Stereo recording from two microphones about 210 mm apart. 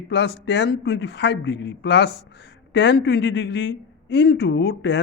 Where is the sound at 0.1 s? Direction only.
55° left (ahead or behind).